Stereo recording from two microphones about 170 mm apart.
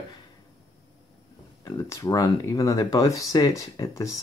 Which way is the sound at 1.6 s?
20° left (ahead or behind).